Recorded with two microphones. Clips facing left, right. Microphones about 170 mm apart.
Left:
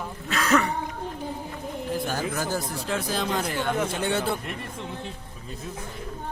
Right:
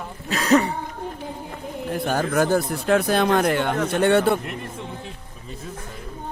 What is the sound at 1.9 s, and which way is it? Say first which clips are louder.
Speech: right 6 dB; 60° right (ahead or behind).